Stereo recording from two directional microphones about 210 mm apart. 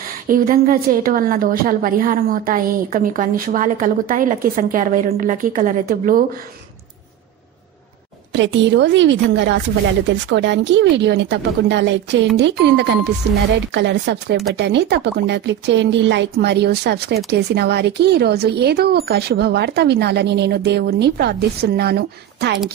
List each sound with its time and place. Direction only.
0.3 s a woman's voice: 40° right (ahead or behind)
8.3 s speech: 60° right (ahead or behind)